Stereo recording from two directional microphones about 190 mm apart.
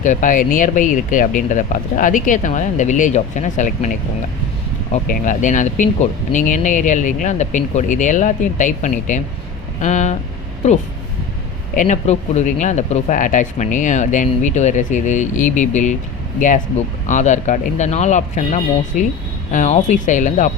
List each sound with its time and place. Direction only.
0.0 s speech: 40° left (ahead or behind)
5.0 s speech: 45° left (ahead or behind)
11.7 s speech: 40° left (ahead or behind)